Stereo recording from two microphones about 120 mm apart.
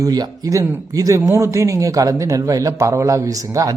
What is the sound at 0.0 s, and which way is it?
Speech, 30° right (ahead or behind).